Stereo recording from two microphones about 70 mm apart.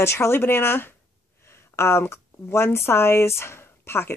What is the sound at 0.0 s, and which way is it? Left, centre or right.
Speech, left.